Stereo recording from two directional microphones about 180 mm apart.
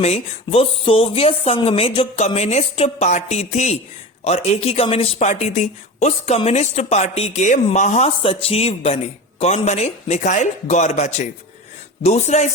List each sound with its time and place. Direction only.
0.0 s a woman's voice: 35° left (ahead or behind)